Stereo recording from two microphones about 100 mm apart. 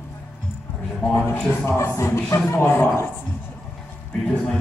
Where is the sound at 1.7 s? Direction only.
25° left (ahead or behind).